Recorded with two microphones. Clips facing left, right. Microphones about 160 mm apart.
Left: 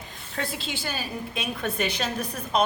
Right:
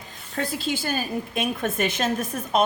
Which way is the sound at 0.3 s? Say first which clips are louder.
Right 5 dB; 50° right (ahead or behind).